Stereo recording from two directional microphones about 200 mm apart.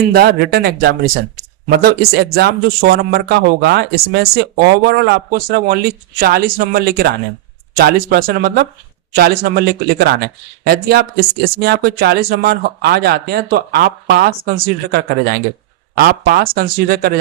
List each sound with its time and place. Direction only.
0.1 s speech: 50° right (ahead or behind)